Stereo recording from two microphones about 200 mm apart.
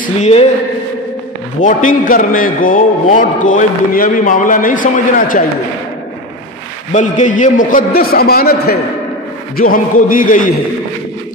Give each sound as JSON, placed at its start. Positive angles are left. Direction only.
{"t": 0.0, "sound": "a man's voice", "side_deg": 35}
{"t": 1.6, "sound": "a man's voice", "side_deg": 40}
{"t": 6.9, "sound": "a man's voice", "side_deg": 40}